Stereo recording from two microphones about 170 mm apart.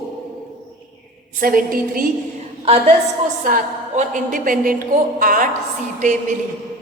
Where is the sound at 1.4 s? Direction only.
55° right (ahead or behind).